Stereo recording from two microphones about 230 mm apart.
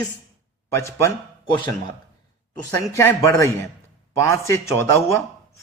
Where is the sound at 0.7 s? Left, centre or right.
Centre.